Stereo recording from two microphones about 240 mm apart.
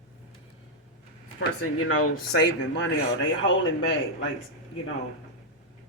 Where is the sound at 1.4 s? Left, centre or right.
Left.